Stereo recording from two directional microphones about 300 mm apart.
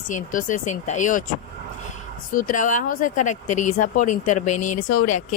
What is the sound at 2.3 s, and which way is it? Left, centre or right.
Speech, left.